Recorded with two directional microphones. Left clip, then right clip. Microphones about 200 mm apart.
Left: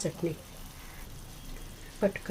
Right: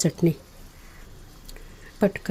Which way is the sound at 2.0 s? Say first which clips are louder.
Right 6 dB; 65° right (ahead or behind).